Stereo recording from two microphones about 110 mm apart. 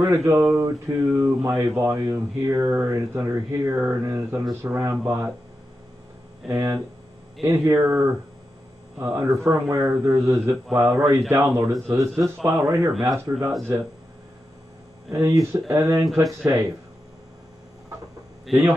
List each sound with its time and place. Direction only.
0.0 s speech: 25° right (ahead or behind)
6.5 s speech: 30° right (ahead or behind)
15.0 s speech: 25° right (ahead or behind)
18.5 s a man's voice: 15° right (ahead or behind)